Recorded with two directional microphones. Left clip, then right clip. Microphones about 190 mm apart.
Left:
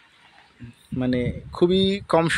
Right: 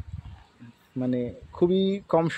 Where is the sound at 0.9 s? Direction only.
15° left (ahead or behind).